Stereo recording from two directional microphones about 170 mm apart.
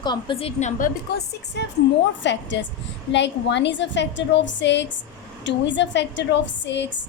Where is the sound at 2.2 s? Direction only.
90° left.